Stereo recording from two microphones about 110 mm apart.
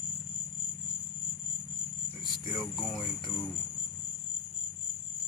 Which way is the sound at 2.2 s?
50° left (ahead or behind).